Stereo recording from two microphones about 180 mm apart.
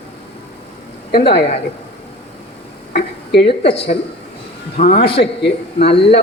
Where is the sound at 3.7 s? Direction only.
35° left (ahead or behind).